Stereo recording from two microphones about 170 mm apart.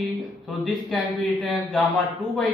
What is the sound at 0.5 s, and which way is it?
A man's voice, centre (ahead or behind).